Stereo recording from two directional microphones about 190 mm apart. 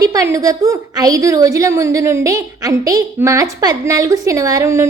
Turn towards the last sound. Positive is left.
turn(degrees=-15)  # may be behind; listen again after turning